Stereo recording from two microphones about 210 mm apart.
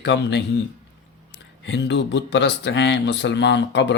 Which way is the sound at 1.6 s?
60° left (ahead or behind).